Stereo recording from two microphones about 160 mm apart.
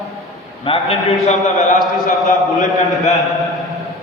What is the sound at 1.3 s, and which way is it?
Speech, 45° left (ahead or behind).